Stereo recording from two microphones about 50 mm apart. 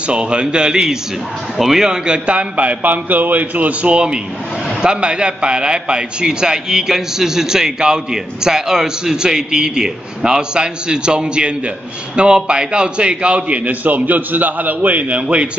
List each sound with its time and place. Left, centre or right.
0.0 s a man's voice: right